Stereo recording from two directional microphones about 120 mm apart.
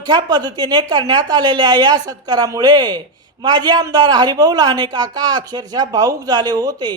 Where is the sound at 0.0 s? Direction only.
35° right (ahead or behind).